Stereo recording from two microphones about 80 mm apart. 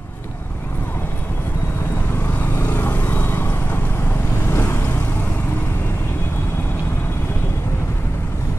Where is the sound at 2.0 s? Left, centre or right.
Left.